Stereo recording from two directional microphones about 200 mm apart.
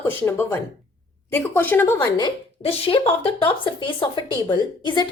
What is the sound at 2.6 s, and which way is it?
A woman's voice, 30° left (ahead or behind).